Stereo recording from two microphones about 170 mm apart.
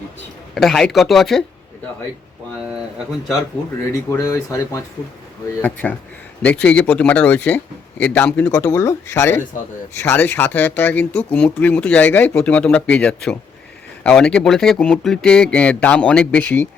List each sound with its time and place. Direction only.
0.5 s speech: centre (ahead or behind)
4.1 s speech: 20° left (ahead or behind)